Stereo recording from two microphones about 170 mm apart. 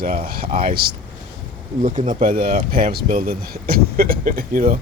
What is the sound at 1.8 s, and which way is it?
Speech, 45° right (ahead or behind).